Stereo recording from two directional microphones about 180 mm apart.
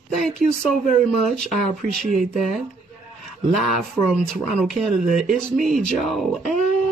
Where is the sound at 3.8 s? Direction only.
Centre (ahead or behind).